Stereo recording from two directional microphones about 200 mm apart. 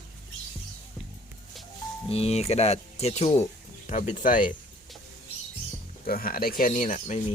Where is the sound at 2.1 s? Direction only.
30° left (ahead or behind).